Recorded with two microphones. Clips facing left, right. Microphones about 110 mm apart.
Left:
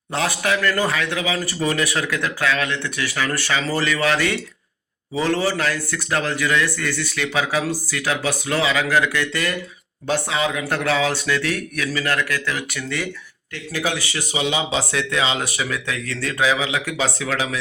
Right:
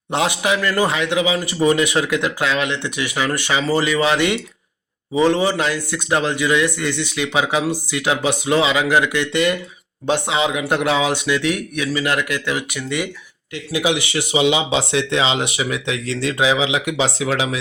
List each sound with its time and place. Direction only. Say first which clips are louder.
0.1 s speech: right 3 dB; 20° right (ahead or behind)